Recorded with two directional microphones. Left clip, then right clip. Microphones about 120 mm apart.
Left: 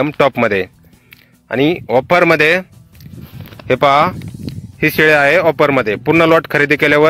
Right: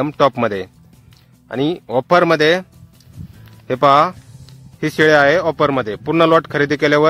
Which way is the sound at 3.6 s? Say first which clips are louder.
Left 1 dB; 20° left (ahead or behind).